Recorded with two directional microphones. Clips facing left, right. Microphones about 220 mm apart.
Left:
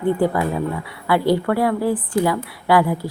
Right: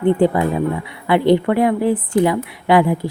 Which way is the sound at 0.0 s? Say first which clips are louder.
Right 4 dB; 25° right (ahead or behind).